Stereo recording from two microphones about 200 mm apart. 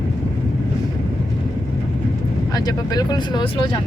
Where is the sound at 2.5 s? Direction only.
20° left (ahead or behind).